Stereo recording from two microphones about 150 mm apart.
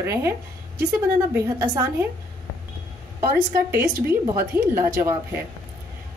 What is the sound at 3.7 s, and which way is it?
A woman's voice, 15° right (ahead or behind).